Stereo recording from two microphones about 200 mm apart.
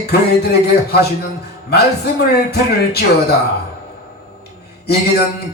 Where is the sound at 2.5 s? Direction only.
55° left (ahead or behind).